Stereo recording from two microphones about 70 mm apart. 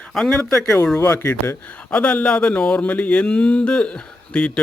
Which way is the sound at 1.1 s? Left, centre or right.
Left.